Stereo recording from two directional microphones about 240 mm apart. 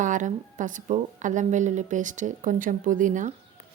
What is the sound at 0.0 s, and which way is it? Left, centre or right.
A woman's voice, right.